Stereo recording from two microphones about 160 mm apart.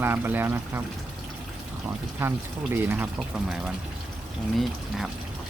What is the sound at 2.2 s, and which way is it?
Speech, 15° right (ahead or behind).